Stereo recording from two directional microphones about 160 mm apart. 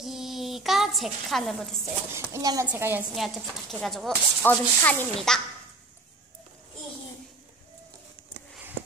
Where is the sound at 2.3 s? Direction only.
20° right (ahead or behind).